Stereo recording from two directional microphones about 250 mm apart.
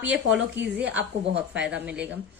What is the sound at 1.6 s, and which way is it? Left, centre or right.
Speech, centre.